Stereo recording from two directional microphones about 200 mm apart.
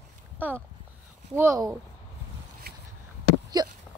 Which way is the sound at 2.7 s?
50° right (ahead or behind).